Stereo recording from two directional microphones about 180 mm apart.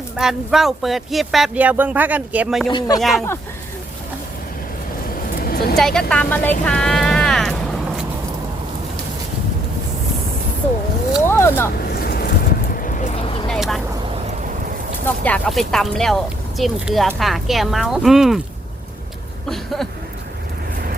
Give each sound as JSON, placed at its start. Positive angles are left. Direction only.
{"t": 0.2, "sound": "speech", "side_deg": 0}
{"t": 2.6, "sound": "speech", "side_deg": 25}
{"t": 3.0, "sound": "speech", "side_deg": 0}
{"t": 5.4, "sound": "vehicle", "side_deg": 55}
{"t": 5.7, "sound": "speech", "side_deg": 5}
{"t": 11.3, "sound": "speech", "side_deg": 15}
{"t": 12.0, "sound": "vehicle", "side_deg": 55}
{"t": 13.5, "sound": "speech", "side_deg": 0}
{"t": 15.0, "sound": "speech", "side_deg": 10}
{"t": 19.5, "sound": "speech", "side_deg": 0}